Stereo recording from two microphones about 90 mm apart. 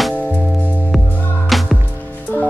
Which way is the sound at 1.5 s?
Centre (ahead or behind).